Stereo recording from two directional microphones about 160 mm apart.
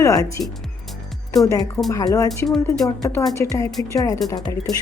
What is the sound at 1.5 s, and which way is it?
Speech, 20° left (ahead or behind).